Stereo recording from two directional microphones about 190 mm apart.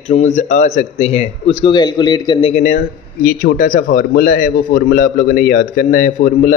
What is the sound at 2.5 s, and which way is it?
A man's voice, 40° left (ahead or behind).